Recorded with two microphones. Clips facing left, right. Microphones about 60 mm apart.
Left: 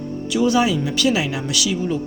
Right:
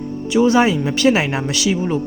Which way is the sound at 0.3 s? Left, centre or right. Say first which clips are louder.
Right 4 dB; right.